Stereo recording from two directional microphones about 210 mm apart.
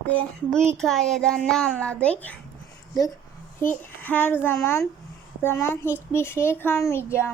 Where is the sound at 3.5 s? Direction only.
10° left (ahead or behind).